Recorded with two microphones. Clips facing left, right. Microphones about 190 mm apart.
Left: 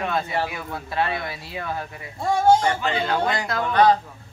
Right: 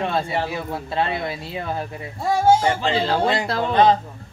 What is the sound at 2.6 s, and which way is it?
Speech, 30° right (ahead or behind).